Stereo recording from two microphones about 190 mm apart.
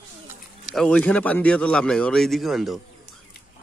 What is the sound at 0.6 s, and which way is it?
A man's voice, 5° left (ahead or behind).